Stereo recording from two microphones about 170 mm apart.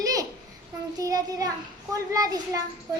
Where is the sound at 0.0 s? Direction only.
20° right (ahead or behind).